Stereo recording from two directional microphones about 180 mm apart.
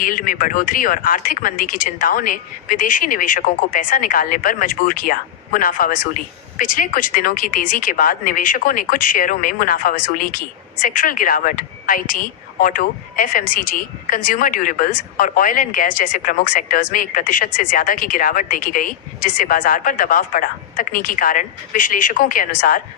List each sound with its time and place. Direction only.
0.0 s speech: 50° left (ahead or behind)